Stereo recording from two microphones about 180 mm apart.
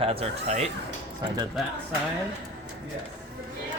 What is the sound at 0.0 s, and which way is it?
Speech, 35° right (ahead or behind).